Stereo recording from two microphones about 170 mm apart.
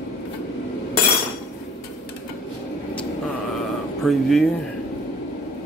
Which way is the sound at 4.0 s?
Centre (ahead or behind).